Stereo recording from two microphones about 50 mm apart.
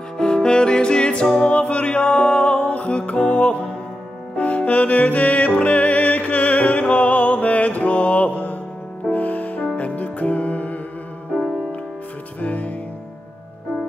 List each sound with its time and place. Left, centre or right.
0.2 s music: centre; by 10.8 s left
12.4 s music: left